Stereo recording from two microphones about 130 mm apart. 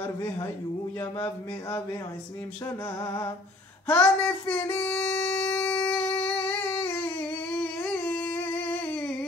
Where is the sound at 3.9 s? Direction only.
10° left (ahead or behind).